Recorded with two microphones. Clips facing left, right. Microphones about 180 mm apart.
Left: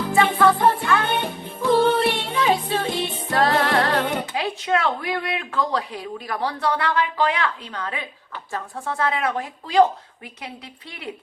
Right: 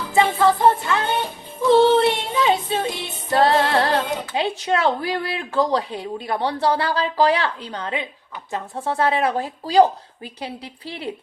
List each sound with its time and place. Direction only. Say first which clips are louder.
0.1 s music: right 1 dB; 25° right (ahead or behind)
4.4 s speech: right 4 dB; 25° right (ahead or behind)